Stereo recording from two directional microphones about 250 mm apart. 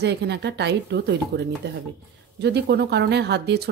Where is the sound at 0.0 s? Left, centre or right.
Right.